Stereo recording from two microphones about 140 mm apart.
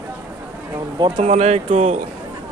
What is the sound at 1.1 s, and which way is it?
Speech, 55° right (ahead or behind).